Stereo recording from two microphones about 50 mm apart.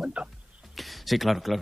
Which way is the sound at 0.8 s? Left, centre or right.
Centre.